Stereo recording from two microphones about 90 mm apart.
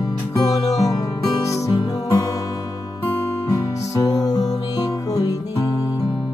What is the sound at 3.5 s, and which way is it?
Music, 40° left (ahead or behind).